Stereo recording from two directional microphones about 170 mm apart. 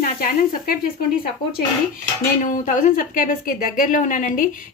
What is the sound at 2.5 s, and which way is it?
A woman's voice, 50° left (ahead or behind).